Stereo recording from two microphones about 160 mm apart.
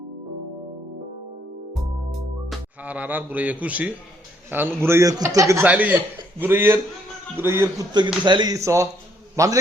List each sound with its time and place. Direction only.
1.7 s music: centre (ahead or behind)
4.5 s a man's voice: 15° right (ahead or behind)
7.9 s a man's voice: 30° right (ahead or behind)